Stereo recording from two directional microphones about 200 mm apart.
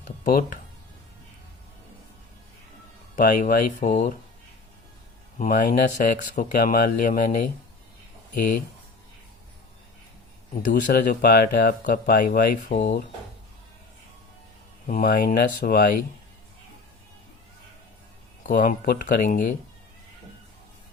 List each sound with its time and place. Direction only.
3.2 s speech: 45° left (ahead or behind)
5.4 s speech: 40° left (ahead or behind)
10.7 s speech: 55° left (ahead or behind); by 13.1 s 40° left (ahead or behind)
14.8 s speech: 40° left (ahead or behind)
18.4 s speech: 40° left (ahead or behind)